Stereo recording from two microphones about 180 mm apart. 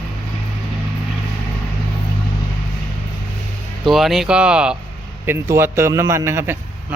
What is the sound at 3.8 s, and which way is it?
A man's voice, centre (ahead or behind).